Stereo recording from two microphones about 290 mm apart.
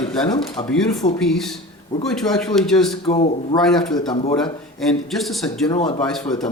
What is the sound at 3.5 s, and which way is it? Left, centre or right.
Speech, centre.